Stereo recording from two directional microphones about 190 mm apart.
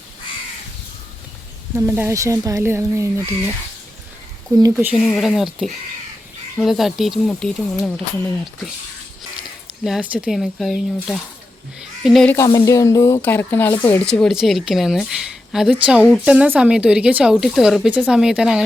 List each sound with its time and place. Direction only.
1.7 s speech: 10° right (ahead or behind)
4.5 s speech: 20° right (ahead or behind)
4.9 s speech: 5° right (ahead or behind)
9.8 s speech: 5° right (ahead or behind)
12.5 s speech: 15° left (ahead or behind); by 18.6 s 5° right (ahead or behind)